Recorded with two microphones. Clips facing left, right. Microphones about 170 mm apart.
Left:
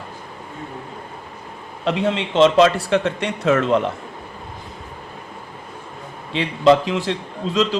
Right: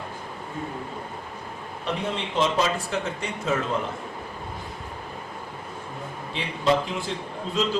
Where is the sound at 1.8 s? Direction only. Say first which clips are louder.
Left 8 dB; 90° left.